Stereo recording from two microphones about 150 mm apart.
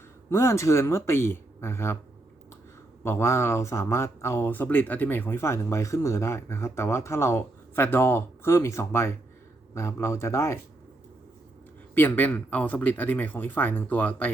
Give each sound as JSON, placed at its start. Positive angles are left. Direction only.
{"t": 0.3, "sound": "speech", "side_deg": 20}
{"t": 3.0, "sound": "speech", "side_deg": 15}
{"t": 11.9, "sound": "speech", "side_deg": 15}